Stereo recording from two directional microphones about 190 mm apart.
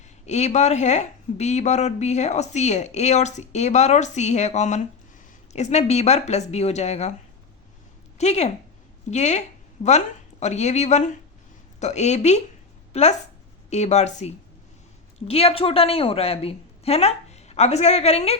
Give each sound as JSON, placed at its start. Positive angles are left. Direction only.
{"t": 0.3, "sound": "a woman's voice", "side_deg": 35}
{"t": 8.2, "sound": "a woman's voice", "side_deg": 35}
{"t": 10.4, "sound": "a woman's voice", "side_deg": 35}